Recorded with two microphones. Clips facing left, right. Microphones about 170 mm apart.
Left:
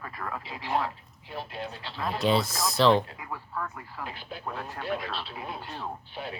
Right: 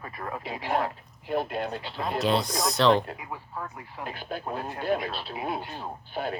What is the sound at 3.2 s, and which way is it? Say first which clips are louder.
Speech: left 1 dB; 25° right (ahead or behind).